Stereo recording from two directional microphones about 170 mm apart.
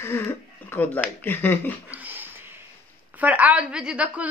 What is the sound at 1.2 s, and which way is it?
Speech, 10° left (ahead or behind).